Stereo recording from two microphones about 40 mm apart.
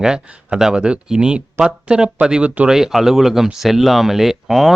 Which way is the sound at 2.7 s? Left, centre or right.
Centre.